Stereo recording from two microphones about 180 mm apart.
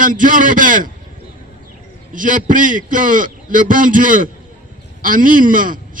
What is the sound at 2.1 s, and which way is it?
A man's voice, 45° right (ahead or behind).